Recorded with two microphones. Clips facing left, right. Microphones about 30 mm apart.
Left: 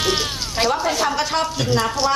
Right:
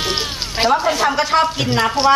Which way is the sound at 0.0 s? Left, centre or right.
Centre.